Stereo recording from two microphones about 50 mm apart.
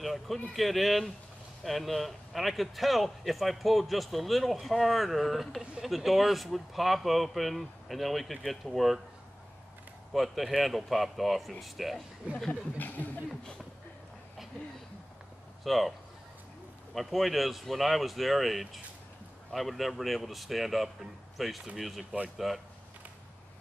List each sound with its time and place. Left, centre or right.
0.0 s a man's voice: centre
10.1 s a man's voice: centre
12.7 s speech: left
15.6 s speech: centre
16.9 s a man's voice: centre